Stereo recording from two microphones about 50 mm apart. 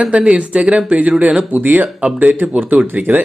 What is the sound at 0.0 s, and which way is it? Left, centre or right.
Speech, right.